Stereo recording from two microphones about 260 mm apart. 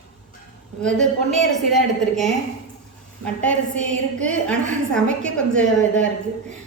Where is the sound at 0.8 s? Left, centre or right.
Centre.